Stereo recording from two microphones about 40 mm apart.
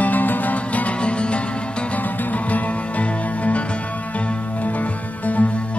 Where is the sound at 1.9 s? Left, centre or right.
Left.